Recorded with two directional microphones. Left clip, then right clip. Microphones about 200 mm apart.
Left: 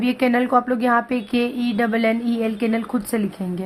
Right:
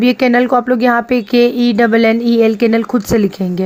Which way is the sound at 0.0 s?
40° right (ahead or behind).